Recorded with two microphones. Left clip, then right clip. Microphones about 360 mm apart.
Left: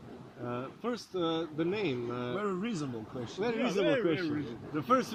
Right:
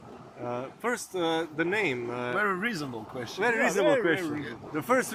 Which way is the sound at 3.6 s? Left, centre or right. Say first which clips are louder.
Right 4 dB; centre.